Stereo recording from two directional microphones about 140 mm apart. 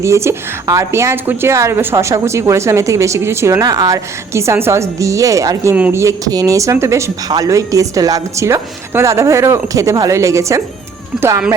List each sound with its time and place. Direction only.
0.0 s a woman's voice: 20° right (ahead or behind)
5.7 s speech: 10° right (ahead or behind)
6.0 s a woman's voice: 25° right (ahead or behind)